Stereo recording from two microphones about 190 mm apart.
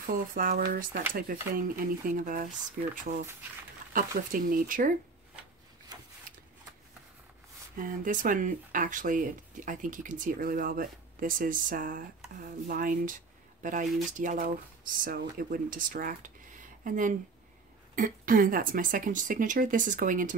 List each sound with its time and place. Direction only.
0.0 s speech: 45° right (ahead or behind)
3.9 s speech: 45° right (ahead or behind)
7.7 s speech: 45° right (ahead or behind)